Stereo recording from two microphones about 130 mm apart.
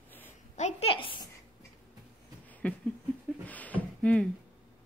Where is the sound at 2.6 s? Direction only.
10° left (ahead or behind).